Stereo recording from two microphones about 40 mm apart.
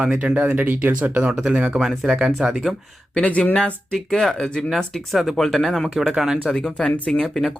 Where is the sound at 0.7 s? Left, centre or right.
Right.